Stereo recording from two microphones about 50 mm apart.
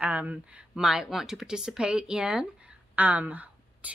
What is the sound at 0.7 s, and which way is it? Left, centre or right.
Speech, centre.